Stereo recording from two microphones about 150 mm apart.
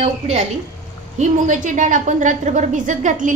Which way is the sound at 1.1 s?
55° right (ahead or behind).